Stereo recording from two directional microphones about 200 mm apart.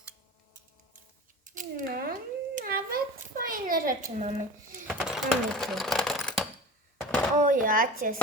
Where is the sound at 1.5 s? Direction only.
45° right (ahead or behind).